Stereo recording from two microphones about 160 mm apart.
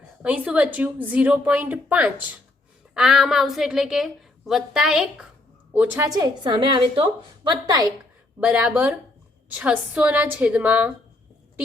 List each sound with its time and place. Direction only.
0.2 s a woman's voice: 10° right (ahead or behind)
6.1 s a woman's voice: 25° right (ahead or behind)
8.4 s a woman's voice: 10° right (ahead or behind)